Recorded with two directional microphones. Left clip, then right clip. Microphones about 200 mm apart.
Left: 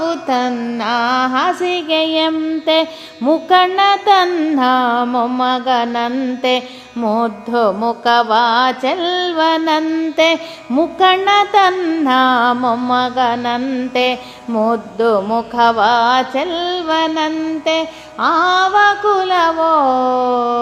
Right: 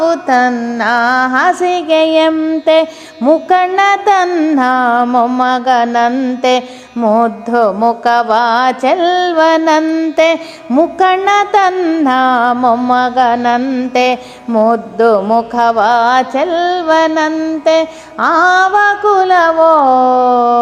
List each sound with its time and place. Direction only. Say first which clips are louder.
0.0 s music: right 6 dB; 25° right (ahead or behind)